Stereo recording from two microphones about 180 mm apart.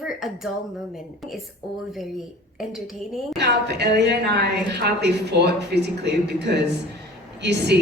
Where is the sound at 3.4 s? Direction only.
70° right (ahead or behind).